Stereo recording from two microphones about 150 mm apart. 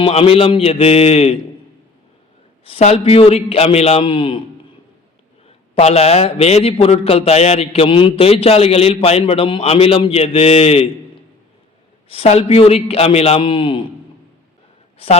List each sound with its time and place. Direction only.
0.0 s a man's voice: 40° left (ahead or behind)
2.6 s a man's voice: 45° left (ahead or behind)
5.5 s a man's voice: 45° left (ahead or behind)
12.0 s a man's voice: 40° left (ahead or behind)
14.9 s a man's voice: 40° left (ahead or behind)